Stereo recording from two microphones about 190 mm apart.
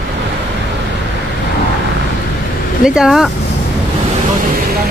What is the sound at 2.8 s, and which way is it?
Speech, 5° right (ahead or behind).